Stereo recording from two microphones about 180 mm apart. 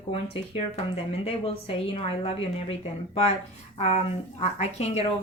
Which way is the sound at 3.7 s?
35° left (ahead or behind).